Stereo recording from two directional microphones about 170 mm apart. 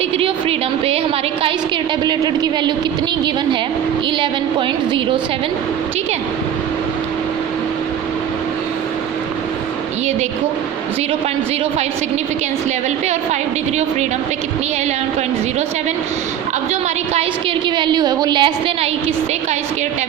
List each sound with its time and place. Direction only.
0.2 s a woman's voice: 35° right (ahead or behind)
2.0 s a woman's voice: 25° right (ahead or behind)
17.7 s a woman's voice: 25° right (ahead or behind)